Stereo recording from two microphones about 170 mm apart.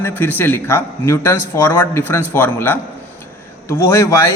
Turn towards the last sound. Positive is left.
turn(degrees=15)  # may be behind; listen again after turning